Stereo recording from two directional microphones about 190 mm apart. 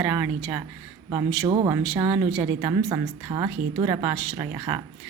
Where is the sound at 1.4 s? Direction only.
25° right (ahead or behind).